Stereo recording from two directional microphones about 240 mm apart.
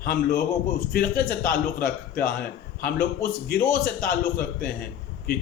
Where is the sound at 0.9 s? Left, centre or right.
Left.